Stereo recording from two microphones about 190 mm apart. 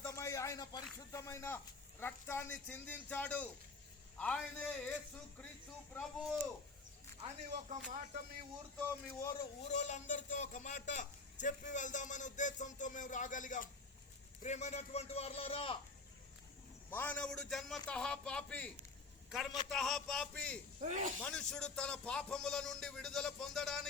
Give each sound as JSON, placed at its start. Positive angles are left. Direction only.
{"t": 0.0, "sound": "a sound", "side_deg": 15}
{"t": 0.9, "sound": "speech", "side_deg": 15}
{"t": 7.2, "sound": "speech", "side_deg": -35}
{"t": 7.9, "sound": "a sound", "side_deg": -45}
{"t": 9.6, "sound": "a man's voice", "side_deg": 35}
{"t": 16.9, "sound": "a man's voice", "side_deg": 10}
{"t": 20.8, "sound": "speech", "side_deg": -40}
{"t": 21.2, "sound": "speech", "side_deg": 5}